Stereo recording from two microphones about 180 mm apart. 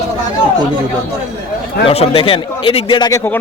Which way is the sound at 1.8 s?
30° left (ahead or behind).